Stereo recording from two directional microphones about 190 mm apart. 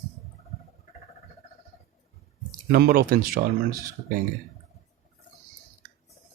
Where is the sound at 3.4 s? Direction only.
60° right (ahead or behind).